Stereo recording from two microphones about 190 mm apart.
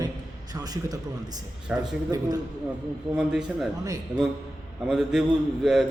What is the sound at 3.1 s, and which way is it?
Speech, 5° right (ahead or behind).